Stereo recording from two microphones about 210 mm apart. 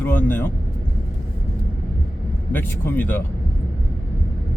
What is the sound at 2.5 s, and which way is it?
Speech, 10° left (ahead or behind).